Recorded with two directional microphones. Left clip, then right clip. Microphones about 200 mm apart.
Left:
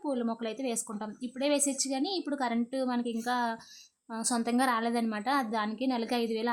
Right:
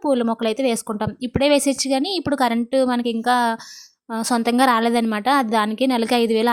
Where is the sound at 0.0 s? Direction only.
35° right (ahead or behind).